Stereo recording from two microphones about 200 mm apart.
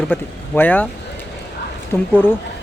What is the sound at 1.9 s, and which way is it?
Speech, 10° left (ahead or behind).